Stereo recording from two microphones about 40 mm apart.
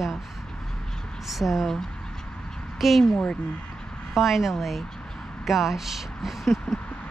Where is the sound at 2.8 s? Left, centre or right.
Centre.